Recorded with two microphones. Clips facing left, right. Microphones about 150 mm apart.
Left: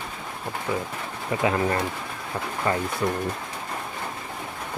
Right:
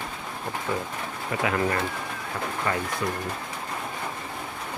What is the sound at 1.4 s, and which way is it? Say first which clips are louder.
Speech: left 2 dB; 25° left (ahead or behind).